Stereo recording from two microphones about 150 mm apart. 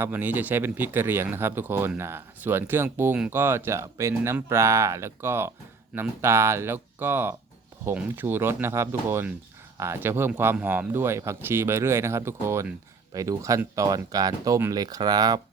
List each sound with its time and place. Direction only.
0.0 s speech: 15° right (ahead or behind)